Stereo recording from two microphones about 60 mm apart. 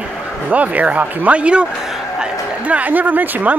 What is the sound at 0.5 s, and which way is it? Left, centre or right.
Speech, right.